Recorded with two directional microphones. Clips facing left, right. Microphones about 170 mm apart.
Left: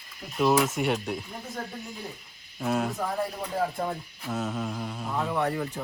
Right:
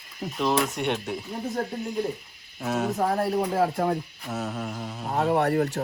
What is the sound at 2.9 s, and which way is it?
Speech, 65° right (ahead or behind).